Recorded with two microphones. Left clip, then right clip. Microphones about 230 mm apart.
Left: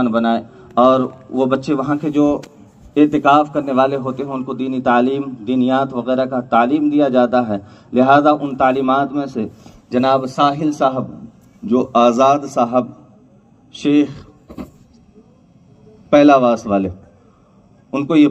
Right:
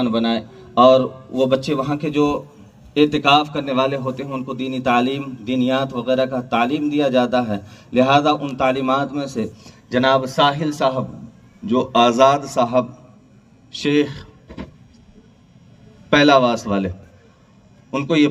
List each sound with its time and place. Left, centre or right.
0.0 s a man's voice: right
16.0 s a man's voice: right
17.9 s a man's voice: right